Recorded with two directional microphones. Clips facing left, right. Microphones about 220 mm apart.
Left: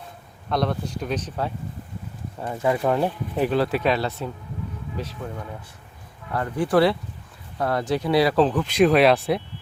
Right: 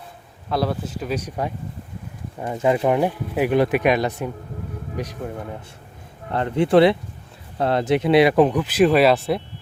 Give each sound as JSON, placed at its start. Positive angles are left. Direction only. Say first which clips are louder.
{"t": 0.5, "sound": "speech", "louder": "right 1 dB", "side_deg": -5}
{"t": 2.6, "sound": "speech", "louder": "right 3 dB", "side_deg": -20}
{"t": 6.3, "sound": "speech", "louder": "right 4 dB", "side_deg": -25}